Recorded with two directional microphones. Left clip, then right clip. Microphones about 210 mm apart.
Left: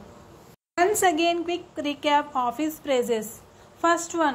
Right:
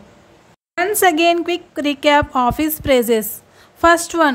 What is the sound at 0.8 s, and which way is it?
A woman's voice, 35° right (ahead or behind).